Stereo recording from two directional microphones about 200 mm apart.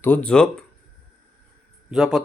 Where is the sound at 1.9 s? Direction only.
Centre (ahead or behind).